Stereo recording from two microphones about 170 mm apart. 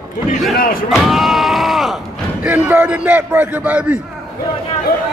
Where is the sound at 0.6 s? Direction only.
60° left (ahead or behind).